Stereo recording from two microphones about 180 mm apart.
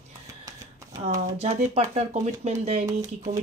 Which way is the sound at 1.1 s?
40° right (ahead or behind).